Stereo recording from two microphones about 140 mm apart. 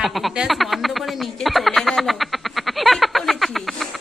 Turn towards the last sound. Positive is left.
turn(degrees=0)  # may be behind; listen again after turning